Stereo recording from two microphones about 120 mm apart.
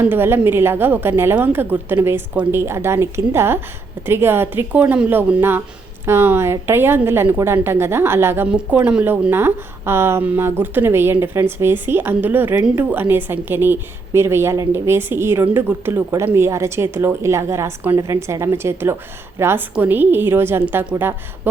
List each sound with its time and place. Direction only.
0.0 s a woman's voice: 15° right (ahead or behind)
8.4 s a woman's voice: 10° right (ahead or behind)